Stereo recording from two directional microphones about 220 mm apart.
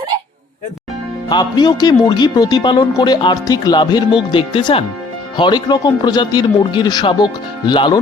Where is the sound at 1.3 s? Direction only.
20° left (ahead or behind).